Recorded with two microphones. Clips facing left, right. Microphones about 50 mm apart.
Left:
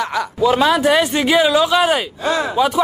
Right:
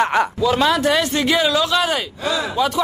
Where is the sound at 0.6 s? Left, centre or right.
Centre.